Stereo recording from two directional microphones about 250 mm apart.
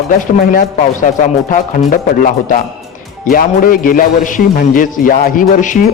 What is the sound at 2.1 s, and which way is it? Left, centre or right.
A man's voice, left.